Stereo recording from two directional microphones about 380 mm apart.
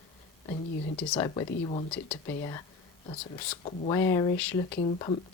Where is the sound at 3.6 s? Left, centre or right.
Centre.